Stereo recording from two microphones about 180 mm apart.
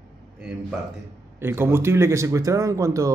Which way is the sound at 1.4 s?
15° right (ahead or behind).